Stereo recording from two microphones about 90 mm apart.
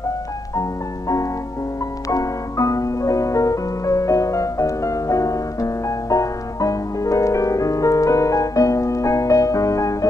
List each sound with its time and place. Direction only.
0.6 s music: 40° left (ahead or behind)